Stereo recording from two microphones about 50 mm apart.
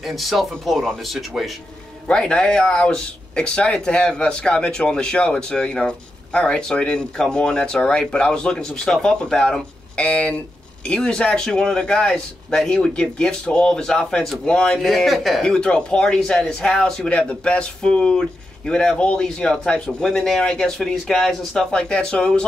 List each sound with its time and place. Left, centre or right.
0.0 s speech: centre
2.0 s speech: centre
10.0 s speech: left
14.8 s speech: centre
15.4 s speech: centre
21.5 s speech: centre